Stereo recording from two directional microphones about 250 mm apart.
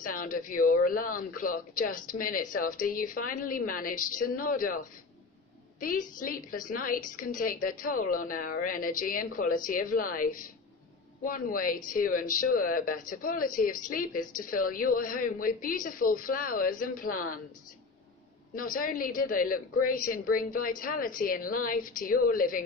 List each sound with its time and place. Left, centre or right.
0.0 s a woman's voice: left
18.5 s a woman's voice: left